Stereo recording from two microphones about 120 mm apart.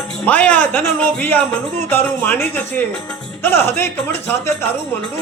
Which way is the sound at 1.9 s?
15° left (ahead or behind).